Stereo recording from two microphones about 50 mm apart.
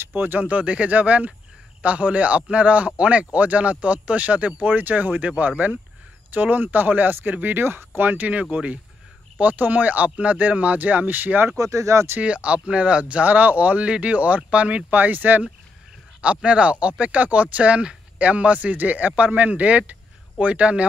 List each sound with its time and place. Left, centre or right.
0.1 s a man's voice: right
8.1 s speech: right
11.5 s speech: right
12.2 s a man's voice: right
15.0 s speech: right
16.4 s a man's voice: right
19.9 s a sound: right